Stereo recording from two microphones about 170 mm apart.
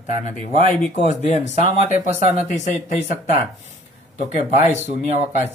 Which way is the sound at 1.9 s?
40° right (ahead or behind).